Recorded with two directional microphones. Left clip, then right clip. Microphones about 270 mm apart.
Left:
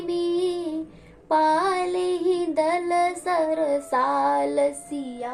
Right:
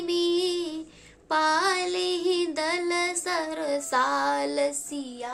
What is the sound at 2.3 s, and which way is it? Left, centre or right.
Child singing, centre.